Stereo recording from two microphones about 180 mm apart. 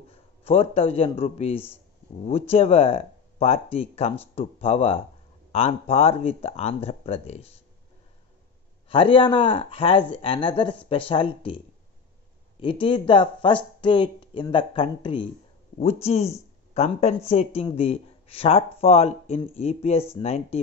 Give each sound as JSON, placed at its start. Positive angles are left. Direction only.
{"t": 0.1, "sound": "speech", "side_deg": 30}
{"t": 8.8, "sound": "speech", "side_deg": 30}